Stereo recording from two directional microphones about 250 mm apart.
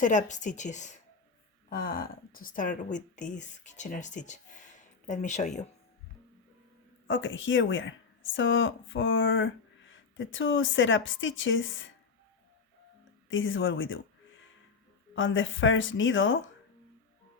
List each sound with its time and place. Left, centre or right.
0.0 s a woman's voice: left
7.1 s speech: left
13.3 s speech: left
15.1 s speech: left